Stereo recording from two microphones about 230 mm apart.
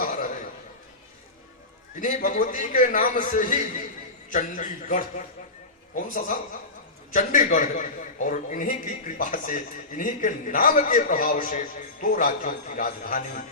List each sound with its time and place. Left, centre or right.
0.0 s chuckle: left
2.0 s a man's voice: left